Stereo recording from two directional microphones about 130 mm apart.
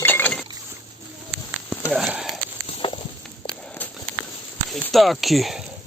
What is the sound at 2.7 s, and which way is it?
Walk, 45° left (ahead or behind).